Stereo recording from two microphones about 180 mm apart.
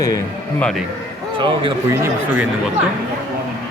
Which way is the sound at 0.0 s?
20° left (ahead or behind).